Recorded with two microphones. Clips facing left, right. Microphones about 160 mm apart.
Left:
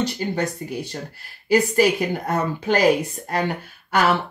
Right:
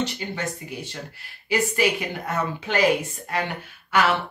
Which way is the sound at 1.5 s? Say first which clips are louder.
Left 5 dB; 40° left (ahead or behind).